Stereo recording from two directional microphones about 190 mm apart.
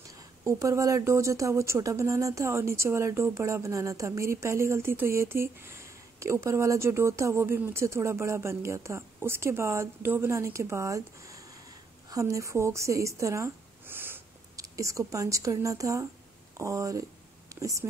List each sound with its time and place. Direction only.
0.1 s a woman's voice: 15° right (ahead or behind)